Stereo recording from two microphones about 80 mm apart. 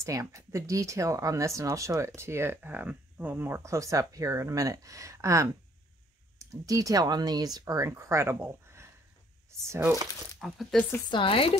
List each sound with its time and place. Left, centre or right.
0.0 s speech: right
3.6 s speech: right
10.4 s speech: centre
11.1 s speech: left